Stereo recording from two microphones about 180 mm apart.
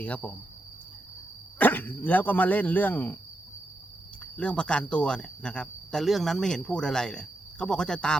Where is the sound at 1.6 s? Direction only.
10° left (ahead or behind).